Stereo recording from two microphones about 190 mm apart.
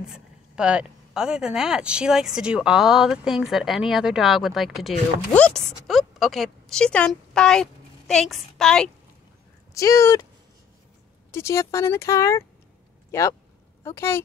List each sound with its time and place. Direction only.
0.0 s speech: 5° right (ahead or behind)
9.8 s speech: 15° left (ahead or behind)
11.3 s speech: 15° left (ahead or behind)